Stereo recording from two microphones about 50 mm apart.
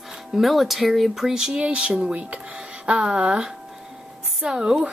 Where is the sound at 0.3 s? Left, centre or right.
Centre.